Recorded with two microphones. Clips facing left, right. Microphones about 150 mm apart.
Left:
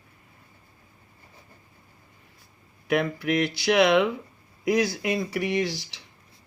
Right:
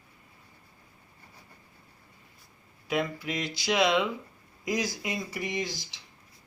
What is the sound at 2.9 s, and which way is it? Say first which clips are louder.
Speech: left 6 dB; 60° left (ahead or behind).